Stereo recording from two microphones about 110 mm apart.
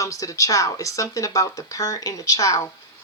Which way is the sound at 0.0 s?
30° left (ahead or behind).